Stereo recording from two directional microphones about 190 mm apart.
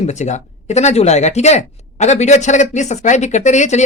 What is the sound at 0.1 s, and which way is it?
Speech, 40° left (ahead or behind).